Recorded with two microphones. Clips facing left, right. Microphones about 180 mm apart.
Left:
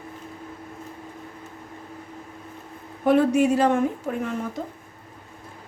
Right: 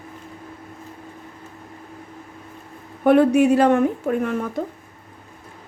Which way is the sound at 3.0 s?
65° right (ahead or behind).